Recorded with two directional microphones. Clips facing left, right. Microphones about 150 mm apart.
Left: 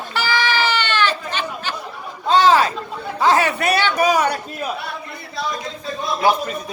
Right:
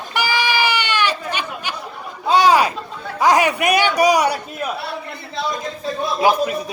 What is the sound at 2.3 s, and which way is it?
A man's voice, 15° right (ahead or behind).